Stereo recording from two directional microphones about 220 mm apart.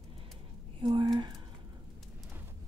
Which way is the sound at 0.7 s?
20° right (ahead or behind).